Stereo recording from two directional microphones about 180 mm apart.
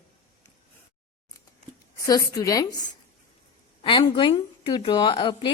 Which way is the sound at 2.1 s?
20° left (ahead or behind).